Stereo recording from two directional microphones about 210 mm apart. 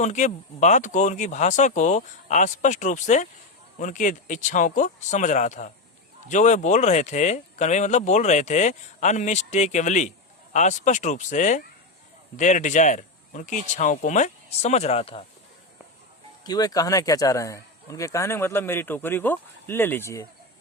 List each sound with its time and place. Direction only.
0.0 s speech: 35° left (ahead or behind)
16.4 s speech: 20° left (ahead or behind)